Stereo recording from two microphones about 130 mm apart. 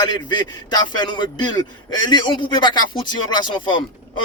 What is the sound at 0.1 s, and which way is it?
Speech, 35° left (ahead or behind).